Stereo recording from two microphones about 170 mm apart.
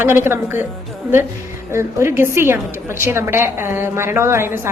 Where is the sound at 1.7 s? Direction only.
15° right (ahead or behind).